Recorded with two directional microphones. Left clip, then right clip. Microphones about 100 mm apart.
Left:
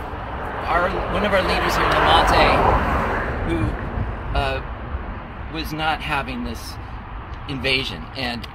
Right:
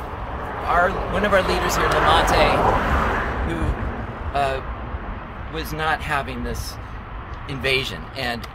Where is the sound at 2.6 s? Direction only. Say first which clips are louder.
Even; 15° left (ahead or behind).